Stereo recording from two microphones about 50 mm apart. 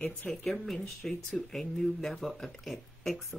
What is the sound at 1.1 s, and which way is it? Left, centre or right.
Speech, centre.